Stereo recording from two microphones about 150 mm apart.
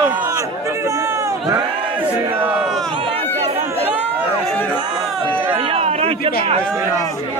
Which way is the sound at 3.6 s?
10° right (ahead or behind).